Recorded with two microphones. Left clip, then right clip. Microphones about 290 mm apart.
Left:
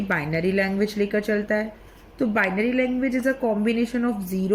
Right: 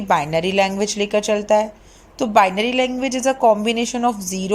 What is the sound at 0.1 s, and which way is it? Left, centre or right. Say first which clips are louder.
A woman's voice: right 7 dB; right.